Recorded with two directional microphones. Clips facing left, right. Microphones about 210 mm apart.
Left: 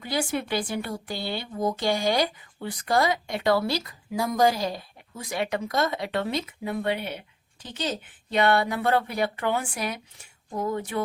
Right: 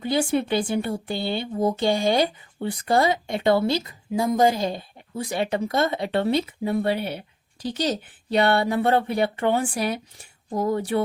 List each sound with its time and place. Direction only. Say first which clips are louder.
0.0 s speech: right 6 dB; 25° right (ahead or behind)